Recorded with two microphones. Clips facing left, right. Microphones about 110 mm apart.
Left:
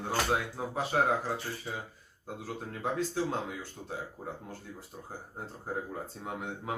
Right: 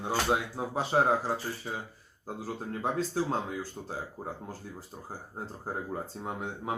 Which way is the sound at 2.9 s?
35° right (ahead or behind).